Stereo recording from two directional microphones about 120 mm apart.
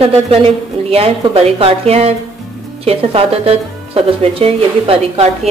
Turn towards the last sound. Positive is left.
turn(degrees=-50)  # may be behind; listen again after turning